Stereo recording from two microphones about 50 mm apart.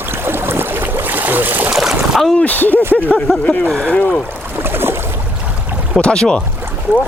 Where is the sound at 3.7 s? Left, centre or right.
Left.